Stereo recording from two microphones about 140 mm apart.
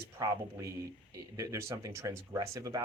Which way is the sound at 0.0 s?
25° right (ahead or behind).